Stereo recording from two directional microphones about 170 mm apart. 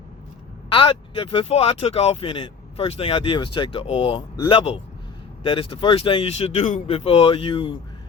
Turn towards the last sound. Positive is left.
turn(degrees=35)  # may be behind; listen again after turning